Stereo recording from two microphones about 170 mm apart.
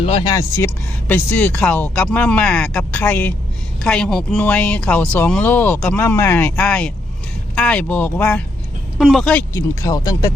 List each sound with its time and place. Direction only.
0.0 s speech: 30° left (ahead or behind)
0.3 s speech: 15° left (ahead or behind)
9.0 s speech: centre (ahead or behind)
9.5 s speech: 20° left (ahead or behind)